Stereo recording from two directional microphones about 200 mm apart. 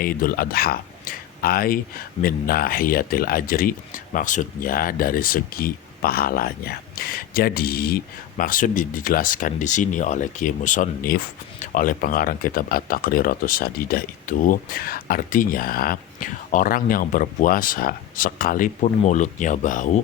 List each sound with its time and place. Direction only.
0.0 s speech: 50° left (ahead or behind)